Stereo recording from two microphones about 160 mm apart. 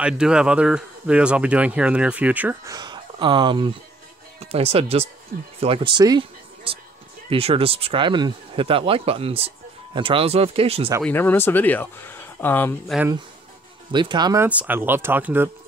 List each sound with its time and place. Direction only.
0.0 s speech: 5° right (ahead or behind)
2.7 s speech: 25° right (ahead or behind)
11.1 s speech: 15° left (ahead or behind)
13.9 s speech: 30° right (ahead or behind)
14.4 s speech: 10° right (ahead or behind)